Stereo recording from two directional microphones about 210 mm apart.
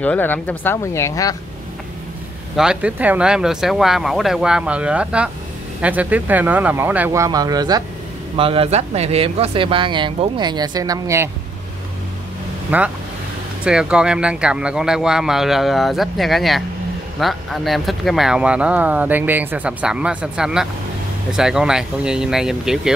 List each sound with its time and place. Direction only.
0.0 s speech: 10° left (ahead or behind)
2.5 s speech: 5° right (ahead or behind)
12.7 s speech: 5° right (ahead or behind)